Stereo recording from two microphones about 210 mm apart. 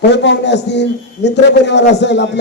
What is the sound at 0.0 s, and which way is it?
A man's voice, 55° left (ahead or behind).